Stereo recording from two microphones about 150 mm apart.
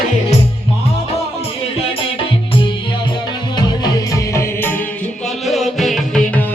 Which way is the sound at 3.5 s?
25° left (ahead or behind).